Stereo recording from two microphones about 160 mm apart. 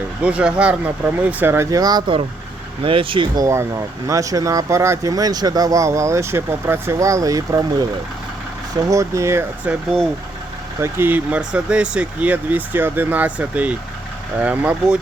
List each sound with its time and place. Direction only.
0.2 s speech: 10° right (ahead or behind); by 3.4 s 30° right (ahead or behind)
3.4 s speech: 20° right (ahead or behind)
8.9 s speech: 20° right (ahead or behind)
10.8 s speech: 15° right (ahead or behind)